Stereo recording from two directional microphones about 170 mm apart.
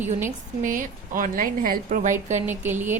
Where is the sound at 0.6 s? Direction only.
50° right (ahead or behind).